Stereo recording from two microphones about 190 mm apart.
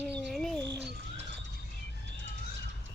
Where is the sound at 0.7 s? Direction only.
65° right (ahead or behind).